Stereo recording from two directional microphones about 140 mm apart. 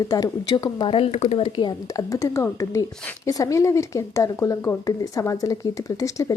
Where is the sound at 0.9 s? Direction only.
50° left (ahead or behind).